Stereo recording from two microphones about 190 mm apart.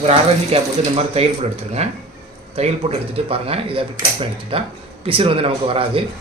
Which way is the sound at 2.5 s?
30° right (ahead or behind).